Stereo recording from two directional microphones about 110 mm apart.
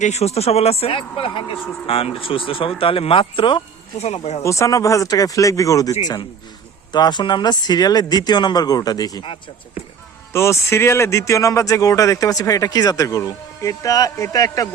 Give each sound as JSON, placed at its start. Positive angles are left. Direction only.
{"t": 0.0, "sound": "speech", "side_deg": 85}
{"t": 3.9, "sound": "speech", "side_deg": 75}
{"t": 4.4, "sound": "speech", "side_deg": 30}
{"t": 6.9, "sound": "speech", "side_deg": 40}
{"t": 10.3, "sound": "speech", "side_deg": 25}